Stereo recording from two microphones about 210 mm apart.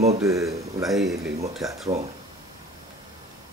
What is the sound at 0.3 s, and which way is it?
Speech, 15° right (ahead or behind).